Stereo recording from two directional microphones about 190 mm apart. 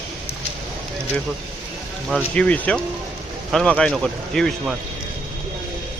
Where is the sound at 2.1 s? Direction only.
5° left (ahead or behind).